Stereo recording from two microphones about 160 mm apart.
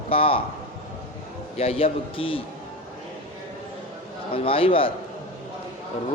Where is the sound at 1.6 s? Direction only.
40° left (ahead or behind).